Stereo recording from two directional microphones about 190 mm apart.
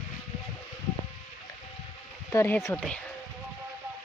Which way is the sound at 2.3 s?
15° left (ahead or behind).